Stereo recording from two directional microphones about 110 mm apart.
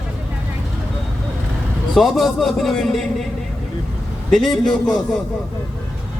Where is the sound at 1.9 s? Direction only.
Centre (ahead or behind).